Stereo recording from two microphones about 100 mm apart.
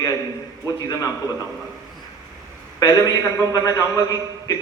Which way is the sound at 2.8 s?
35° left (ahead or behind).